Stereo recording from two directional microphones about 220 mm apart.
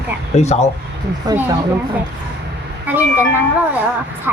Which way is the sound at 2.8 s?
10° right (ahead or behind).